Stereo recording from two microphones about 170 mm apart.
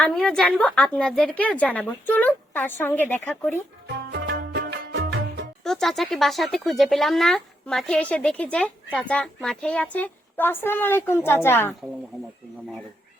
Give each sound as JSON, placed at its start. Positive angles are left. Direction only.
{"t": 0.0, "sound": "speech", "side_deg": 0}
{"t": 4.1, "sound": "music", "side_deg": -90}
{"t": 5.6, "sound": "speech", "side_deg": 0}